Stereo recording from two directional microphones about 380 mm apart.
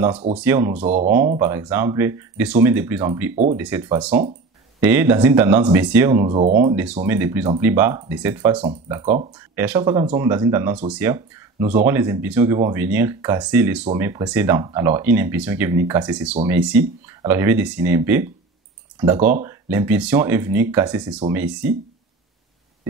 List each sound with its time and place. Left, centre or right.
0.3 s speech: centre
0.7 s speech: centre
1.4 s speech: centre